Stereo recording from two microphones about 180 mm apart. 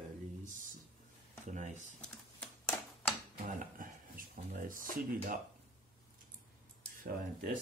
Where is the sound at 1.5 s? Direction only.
40° right (ahead or behind).